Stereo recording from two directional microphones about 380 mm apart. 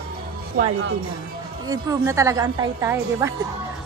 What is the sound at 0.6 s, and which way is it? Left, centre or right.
Speech, right.